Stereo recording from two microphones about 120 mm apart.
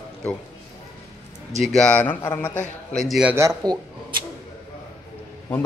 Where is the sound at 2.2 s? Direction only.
20° left (ahead or behind).